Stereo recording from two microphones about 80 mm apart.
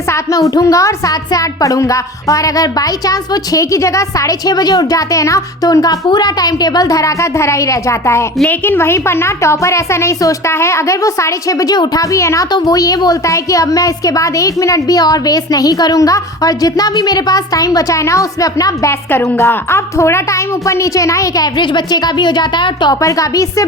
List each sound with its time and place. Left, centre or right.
0.1 s a woman's voice: left
8.4 s a woman's voice: left
12.5 s a woman's voice: left
19.5 s a woman's voice: left
21.4 s speech: left
23.0 s a woman's voice: left